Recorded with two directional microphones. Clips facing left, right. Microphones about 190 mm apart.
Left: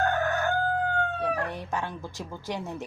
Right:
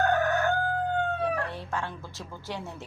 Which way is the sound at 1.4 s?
15° left (ahead or behind).